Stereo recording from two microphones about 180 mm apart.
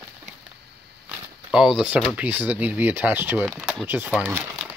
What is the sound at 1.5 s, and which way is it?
Speech, 5° right (ahead or behind).